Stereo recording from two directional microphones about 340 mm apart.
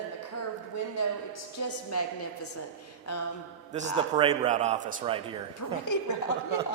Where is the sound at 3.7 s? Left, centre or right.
Centre.